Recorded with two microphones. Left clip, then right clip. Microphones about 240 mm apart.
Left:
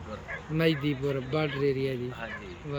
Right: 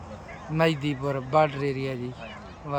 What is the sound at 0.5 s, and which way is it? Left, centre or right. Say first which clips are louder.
Speech: right 3 dB; centre.